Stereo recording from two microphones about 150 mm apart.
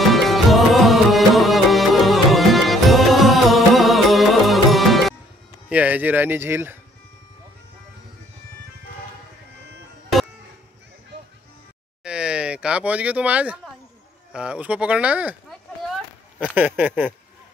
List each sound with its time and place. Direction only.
0.0 s music: centre (ahead or behind)
5.7 s speech: 10° right (ahead or behind)
12.0 s a sound: 5° right (ahead or behind)
14.3 s speech: 5° right (ahead or behind)
16.3 s speech: 10° right (ahead or behind)